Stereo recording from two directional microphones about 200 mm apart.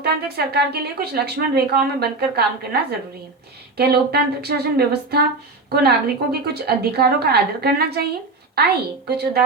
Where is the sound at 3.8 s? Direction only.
50° right (ahead or behind).